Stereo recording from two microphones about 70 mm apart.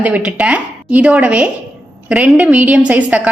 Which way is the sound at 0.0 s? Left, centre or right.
Right.